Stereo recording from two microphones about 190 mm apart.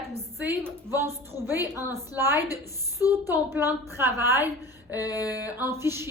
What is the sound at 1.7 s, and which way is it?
Speech, 15° right (ahead or behind).